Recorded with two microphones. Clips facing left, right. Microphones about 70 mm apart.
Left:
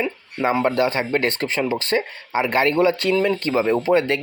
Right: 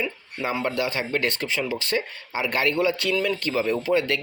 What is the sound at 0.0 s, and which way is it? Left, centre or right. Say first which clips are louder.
Speech: left 6 dB; left.